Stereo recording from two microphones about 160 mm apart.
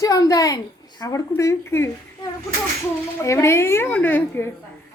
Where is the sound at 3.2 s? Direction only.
20° left (ahead or behind).